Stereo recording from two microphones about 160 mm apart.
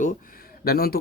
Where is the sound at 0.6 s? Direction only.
75° left (ahead or behind).